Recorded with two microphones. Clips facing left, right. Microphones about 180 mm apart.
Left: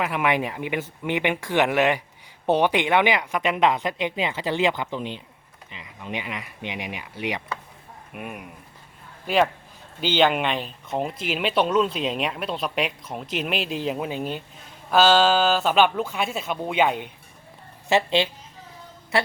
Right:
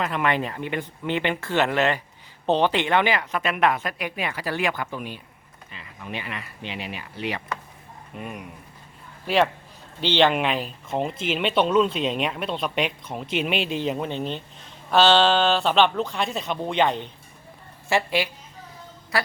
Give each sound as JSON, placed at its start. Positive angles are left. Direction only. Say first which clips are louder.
{"t": 0.0, "sound": "speech", "louder": "left 1 dB", "side_deg": 10}
{"t": 17.8, "sound": "a man's voice", "louder": "left 2 dB", "side_deg": 20}